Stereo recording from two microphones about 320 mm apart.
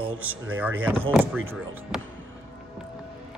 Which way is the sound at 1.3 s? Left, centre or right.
Right.